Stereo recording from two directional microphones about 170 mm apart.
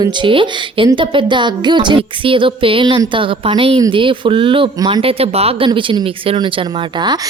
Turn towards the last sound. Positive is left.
turn(degrees=-25)  # may be behind; listen again after turning